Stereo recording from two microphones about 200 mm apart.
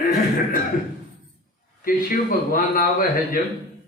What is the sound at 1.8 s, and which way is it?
A man's voice, 45° left (ahead or behind).